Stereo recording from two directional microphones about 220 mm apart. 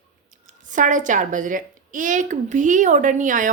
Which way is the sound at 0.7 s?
35° right (ahead or behind).